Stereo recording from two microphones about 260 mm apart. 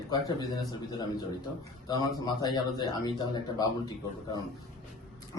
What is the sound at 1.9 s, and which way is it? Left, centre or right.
A man's voice, centre.